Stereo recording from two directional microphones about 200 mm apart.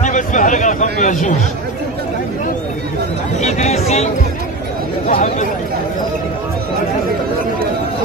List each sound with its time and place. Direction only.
0.0 s speech: 40° left (ahead or behind)
3.3 s speech: 35° left (ahead or behind)